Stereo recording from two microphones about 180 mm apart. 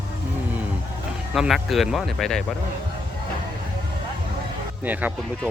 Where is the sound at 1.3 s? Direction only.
Centre (ahead or behind).